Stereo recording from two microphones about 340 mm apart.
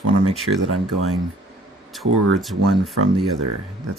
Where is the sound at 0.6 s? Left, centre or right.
Right.